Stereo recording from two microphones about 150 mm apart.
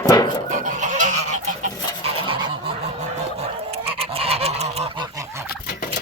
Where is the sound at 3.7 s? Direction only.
40° right (ahead or behind).